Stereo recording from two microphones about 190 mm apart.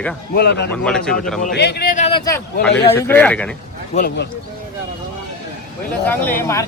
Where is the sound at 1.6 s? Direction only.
60° left (ahead or behind).